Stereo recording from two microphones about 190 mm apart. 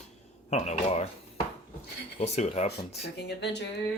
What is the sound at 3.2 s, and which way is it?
Speech, 60° left (ahead or behind).